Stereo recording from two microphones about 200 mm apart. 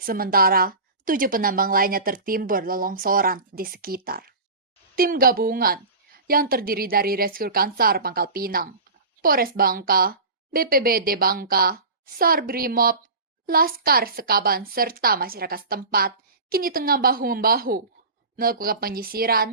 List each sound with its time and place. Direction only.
0.0 s a woman's voice: 45° right (ahead or behind)